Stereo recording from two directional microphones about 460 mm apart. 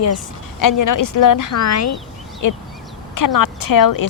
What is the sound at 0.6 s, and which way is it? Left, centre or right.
A woman's voice, left.